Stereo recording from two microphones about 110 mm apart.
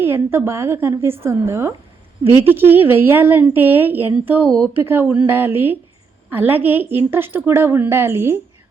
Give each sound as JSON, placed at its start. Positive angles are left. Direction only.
{"t": 0.0, "sound": "a woman's voice", "side_deg": -20}